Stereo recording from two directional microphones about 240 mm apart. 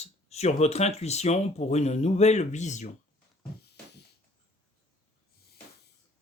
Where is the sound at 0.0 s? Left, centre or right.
Left.